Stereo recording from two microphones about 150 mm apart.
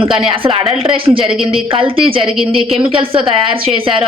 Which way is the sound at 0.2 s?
35° right (ahead or behind).